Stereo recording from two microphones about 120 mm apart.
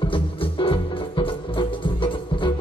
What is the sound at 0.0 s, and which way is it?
Music, 45° left (ahead or behind).